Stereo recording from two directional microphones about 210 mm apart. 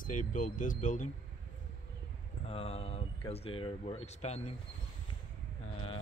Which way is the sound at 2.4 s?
30° left (ahead or behind).